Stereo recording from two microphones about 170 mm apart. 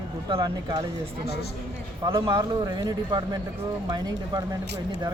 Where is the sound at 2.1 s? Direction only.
25° right (ahead or behind).